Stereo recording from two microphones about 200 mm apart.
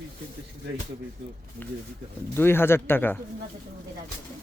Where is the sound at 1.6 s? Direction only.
10° left (ahead or behind).